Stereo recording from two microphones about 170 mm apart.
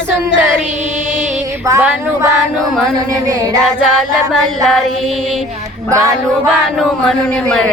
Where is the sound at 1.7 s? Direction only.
15° right (ahead or behind).